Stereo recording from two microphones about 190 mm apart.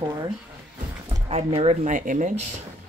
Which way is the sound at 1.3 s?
35° right (ahead or behind).